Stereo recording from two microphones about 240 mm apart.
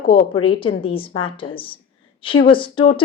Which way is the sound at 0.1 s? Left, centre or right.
Left.